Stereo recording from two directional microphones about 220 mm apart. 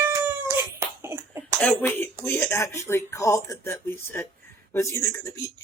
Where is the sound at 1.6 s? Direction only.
5° left (ahead or behind).